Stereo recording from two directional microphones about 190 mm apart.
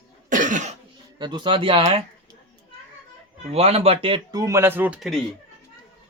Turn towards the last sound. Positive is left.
turn(degrees=0)  # may be behind; listen again after turning